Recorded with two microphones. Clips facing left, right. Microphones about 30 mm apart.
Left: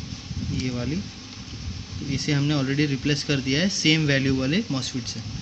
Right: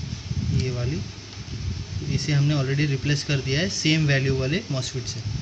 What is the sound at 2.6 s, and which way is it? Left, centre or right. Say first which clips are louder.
Speech: left 2 dB; centre.